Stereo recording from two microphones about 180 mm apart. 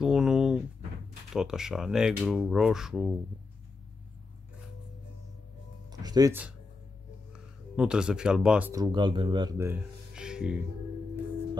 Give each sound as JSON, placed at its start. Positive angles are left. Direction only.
{"t": 0.0, "sound": "a sound", "side_deg": -5}
{"t": 1.3, "sound": "speech", "side_deg": -5}
{"t": 5.9, "sound": "music", "side_deg": -20}
{"t": 7.7, "sound": "speech", "side_deg": -5}
{"t": 8.7, "sound": "speech", "side_deg": -25}
{"t": 10.1, "sound": "music", "side_deg": -5}